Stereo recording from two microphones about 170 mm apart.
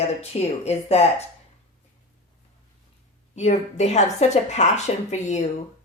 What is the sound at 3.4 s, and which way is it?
A woman's voice, 45° left (ahead or behind).